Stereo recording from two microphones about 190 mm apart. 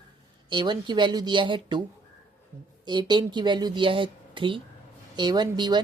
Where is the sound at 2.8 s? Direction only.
25° right (ahead or behind).